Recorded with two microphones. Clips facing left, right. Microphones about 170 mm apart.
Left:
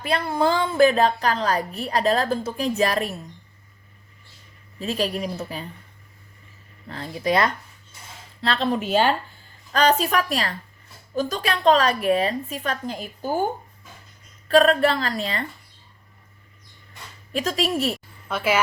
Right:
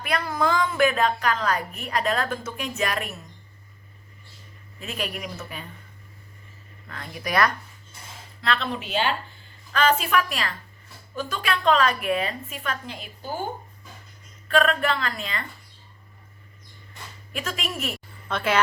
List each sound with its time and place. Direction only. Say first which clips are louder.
0.0 s a woman's voice: left 3 dB; 30° left (ahead or behind)
4.8 s a woman's voice: left 7 dB; 35° left (ahead or behind)
6.8 s a woman's voice: left 8 dB; 30° left (ahead or behind); by 13.5 s 50° left (ahead or behind)
14.4 s a woman's voice: left 5 dB; 35° left (ahead or behind)
17.3 s a woman's voice: left 8 dB; 35° left (ahead or behind)
17.9 s a sound: left 1 dB; 5° left (ahead or behind)